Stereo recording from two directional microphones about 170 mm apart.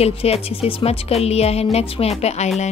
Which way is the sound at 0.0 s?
35° left (ahead or behind).